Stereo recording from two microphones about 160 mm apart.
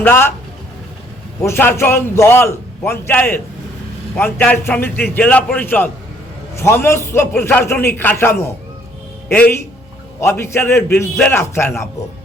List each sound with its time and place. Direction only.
0.0 s a man's voice: 15° left (ahead or behind)
1.4 s a man's voice: 15° left (ahead or behind)